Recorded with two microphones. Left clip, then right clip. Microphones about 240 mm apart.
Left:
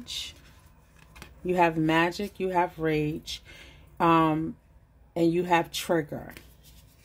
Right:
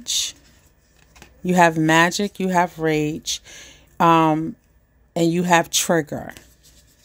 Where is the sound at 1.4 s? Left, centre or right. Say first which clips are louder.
Right 8 dB; right.